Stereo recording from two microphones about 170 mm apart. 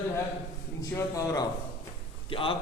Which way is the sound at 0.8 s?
20° left (ahead or behind).